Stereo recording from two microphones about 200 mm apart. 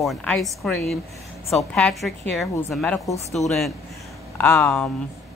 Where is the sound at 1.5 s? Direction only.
5° left (ahead or behind).